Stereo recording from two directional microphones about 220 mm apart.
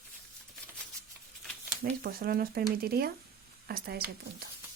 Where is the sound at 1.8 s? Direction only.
45° right (ahead or behind).